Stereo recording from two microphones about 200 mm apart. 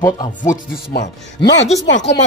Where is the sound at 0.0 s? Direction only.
20° left (ahead or behind).